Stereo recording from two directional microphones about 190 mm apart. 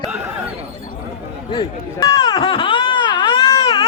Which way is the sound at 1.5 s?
25° left (ahead or behind).